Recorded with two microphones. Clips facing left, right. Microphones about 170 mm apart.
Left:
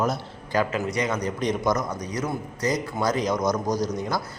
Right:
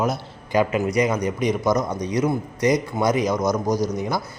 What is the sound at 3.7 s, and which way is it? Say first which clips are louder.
Speech: right 3 dB; 10° left (ahead or behind).